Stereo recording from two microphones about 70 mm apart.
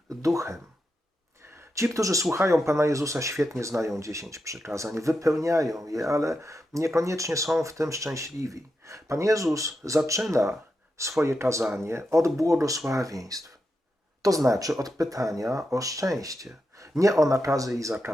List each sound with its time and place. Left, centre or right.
0.2 s speech: right
1.7 s a man's voice: right